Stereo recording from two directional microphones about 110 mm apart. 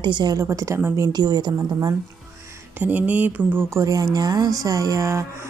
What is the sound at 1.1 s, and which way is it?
Speech, 40° right (ahead or behind).